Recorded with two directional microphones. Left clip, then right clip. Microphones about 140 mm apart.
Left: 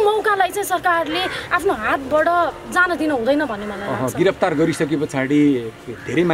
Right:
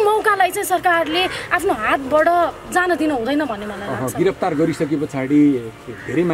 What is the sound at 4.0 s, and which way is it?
Speech, 35° left (ahead or behind).